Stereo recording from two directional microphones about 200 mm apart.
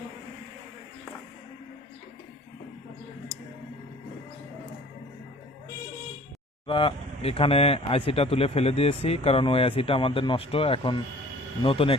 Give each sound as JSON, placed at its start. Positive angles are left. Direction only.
{"t": 6.7, "sound": "speech", "side_deg": 25}